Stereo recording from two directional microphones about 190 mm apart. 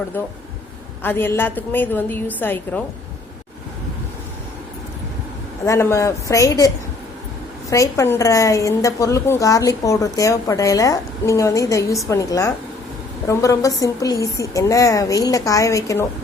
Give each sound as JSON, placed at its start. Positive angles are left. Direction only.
{"t": 1.0, "sound": "a woman's voice", "side_deg": 10}
{"t": 5.6, "sound": "a woman's voice", "side_deg": 15}
{"t": 7.7, "sound": "a woman's voice", "side_deg": 15}